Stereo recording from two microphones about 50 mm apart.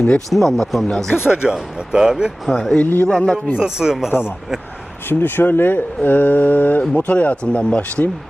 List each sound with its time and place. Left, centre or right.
0.3 s a man's voice: centre
1.3 s speech: centre
2.5 s a man's voice: centre
2.8 s speech: left
3.1 s a man's voice: centre
3.6 s speech: centre
5.0 s speech: left